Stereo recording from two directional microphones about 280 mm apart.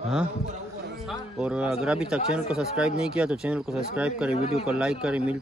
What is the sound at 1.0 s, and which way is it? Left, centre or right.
A man's voice, centre.